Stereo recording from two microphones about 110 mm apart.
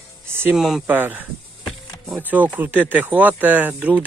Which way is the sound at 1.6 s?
5° right (ahead or behind).